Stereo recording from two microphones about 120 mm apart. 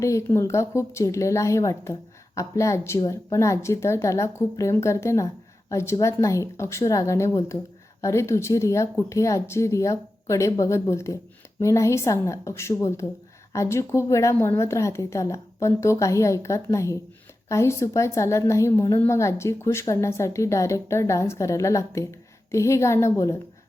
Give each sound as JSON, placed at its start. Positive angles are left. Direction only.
{"t": 0.0, "sound": "a woman's voice", "side_deg": 25}